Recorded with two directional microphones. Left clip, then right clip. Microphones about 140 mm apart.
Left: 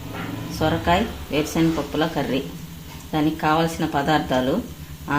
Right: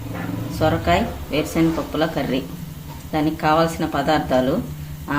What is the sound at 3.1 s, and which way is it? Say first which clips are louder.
Speech: right 2 dB; 20° left (ahead or behind).